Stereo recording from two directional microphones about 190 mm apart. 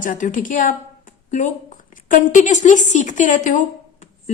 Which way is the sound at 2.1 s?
40° left (ahead or behind).